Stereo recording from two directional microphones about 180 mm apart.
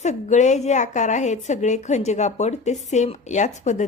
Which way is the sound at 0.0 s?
40° left (ahead or behind).